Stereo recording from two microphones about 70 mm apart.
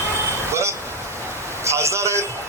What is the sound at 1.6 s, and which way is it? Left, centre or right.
Speech, right.